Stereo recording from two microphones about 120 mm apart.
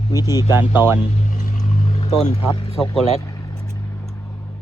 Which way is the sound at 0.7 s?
20° right (ahead or behind).